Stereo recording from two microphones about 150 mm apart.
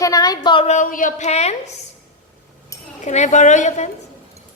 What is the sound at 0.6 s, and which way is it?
Speech, 60° left (ahead or behind).